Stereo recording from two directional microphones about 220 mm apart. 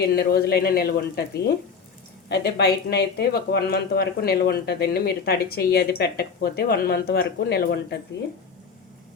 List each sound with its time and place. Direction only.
0.2 s speech: 45° left (ahead or behind)